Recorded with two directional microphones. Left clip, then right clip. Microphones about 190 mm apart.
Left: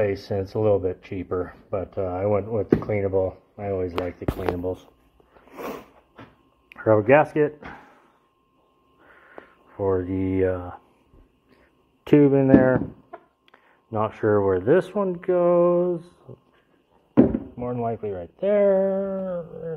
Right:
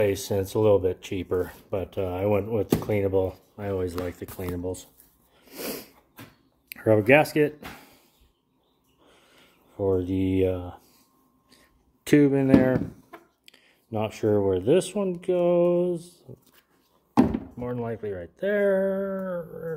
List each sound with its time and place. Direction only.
0.2 s speech: 20° right (ahead or behind)
5.4 s sneeze: 20° right (ahead or behind)
6.7 s speech: 40° right (ahead or behind)
9.8 s speech: 20° right (ahead or behind)
10.0 s speech: 10° left (ahead or behind)
10.4 s speech: 25° right (ahead or behind)
11.5 s a sound: 10° right (ahead or behind)
12.5 s speech: 20° right (ahead or behind)
13.8 s speech: 25° right (ahead or behind)
17.6 s speech: 15° right (ahead or behind)
19.3 s speech: 15° right (ahead or behind)